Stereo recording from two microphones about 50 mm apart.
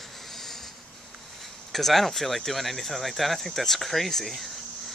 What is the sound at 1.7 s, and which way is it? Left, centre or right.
Speech, centre.